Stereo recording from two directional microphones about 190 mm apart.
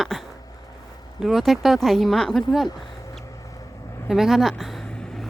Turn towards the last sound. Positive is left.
turn(degrees=5)  # may be behind; listen again after turning